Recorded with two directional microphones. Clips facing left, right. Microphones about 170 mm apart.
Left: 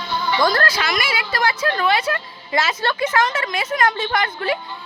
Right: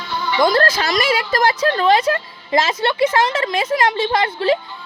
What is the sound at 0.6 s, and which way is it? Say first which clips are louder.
Speech: right 4 dB; 35° right (ahead or behind).